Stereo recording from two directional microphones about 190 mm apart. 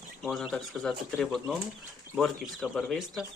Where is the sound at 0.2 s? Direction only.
Centre (ahead or behind).